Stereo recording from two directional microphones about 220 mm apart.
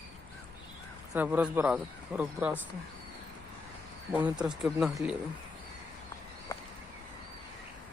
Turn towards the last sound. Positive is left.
turn(degrees=15)  # may be behind; listen again after turning